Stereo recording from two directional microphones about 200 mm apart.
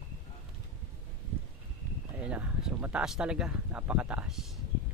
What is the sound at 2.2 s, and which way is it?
Speech, 5° right (ahead or behind).